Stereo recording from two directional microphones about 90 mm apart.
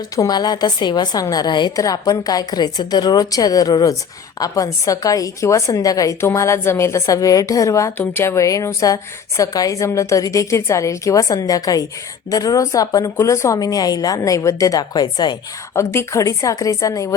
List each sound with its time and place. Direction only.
0.2 s a woman's voice: 50° left (ahead or behind)
1.7 s a woman's voice: 40° left (ahead or behind)
7.9 s a woman's voice: 25° left (ahead or behind); by 15.4 s 55° left (ahead or behind)
15.7 s a woman's voice: 30° left (ahead or behind)